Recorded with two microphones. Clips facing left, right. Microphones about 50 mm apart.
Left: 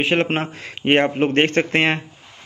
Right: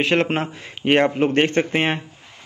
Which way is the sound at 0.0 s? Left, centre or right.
Centre.